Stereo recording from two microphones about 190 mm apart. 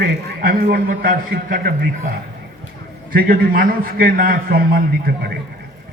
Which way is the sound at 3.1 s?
50° right (ahead or behind).